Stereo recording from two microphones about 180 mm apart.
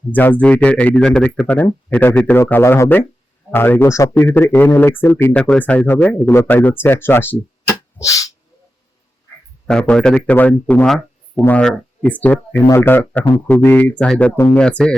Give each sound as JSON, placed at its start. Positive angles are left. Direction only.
{"t": 0.1, "sound": "speech", "side_deg": 10}
{"t": 8.0, "sound": "dog", "side_deg": 20}
{"t": 9.6, "sound": "speech", "side_deg": 5}